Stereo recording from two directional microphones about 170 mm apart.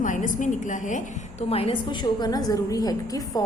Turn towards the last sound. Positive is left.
turn(degrees=20)  # may be behind; listen again after turning